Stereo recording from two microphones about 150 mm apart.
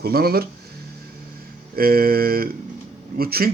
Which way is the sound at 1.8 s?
80° right.